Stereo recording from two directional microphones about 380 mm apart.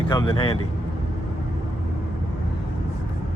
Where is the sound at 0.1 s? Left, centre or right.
Centre.